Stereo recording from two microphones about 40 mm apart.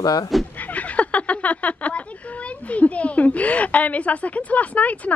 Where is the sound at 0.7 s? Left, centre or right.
Left.